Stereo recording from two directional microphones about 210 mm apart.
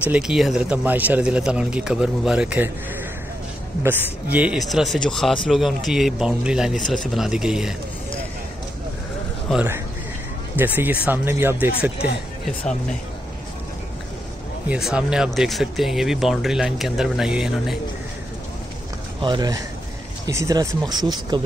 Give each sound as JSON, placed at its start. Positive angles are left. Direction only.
{"t": 0.0, "sound": "speech", "side_deg": -5}
{"t": 3.8, "sound": "speech", "side_deg": -10}
{"t": 9.5, "sound": "speech", "side_deg": -5}
{"t": 14.7, "sound": "speech", "side_deg": -5}
{"t": 19.2, "sound": "speech", "side_deg": -20}